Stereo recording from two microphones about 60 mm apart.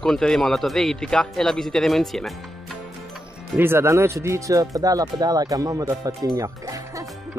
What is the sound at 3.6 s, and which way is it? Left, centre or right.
Speech, right.